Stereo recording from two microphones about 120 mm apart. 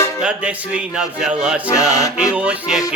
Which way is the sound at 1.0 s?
5° right (ahead or behind).